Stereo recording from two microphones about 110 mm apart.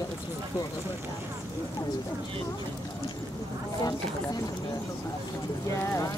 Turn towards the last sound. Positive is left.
turn(degrees=25)  # may be behind; listen again after turning